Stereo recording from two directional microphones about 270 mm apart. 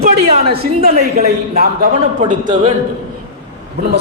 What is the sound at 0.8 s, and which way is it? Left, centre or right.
A man's voice, right.